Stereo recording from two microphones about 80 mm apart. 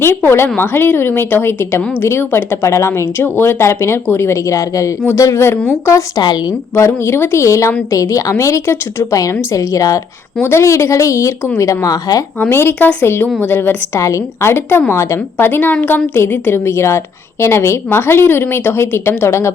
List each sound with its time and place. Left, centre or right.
0.0 s a woman's voice: left
6.7 s speech: left
9.1 s a woman's voice: left
12.4 s a woman's voice: left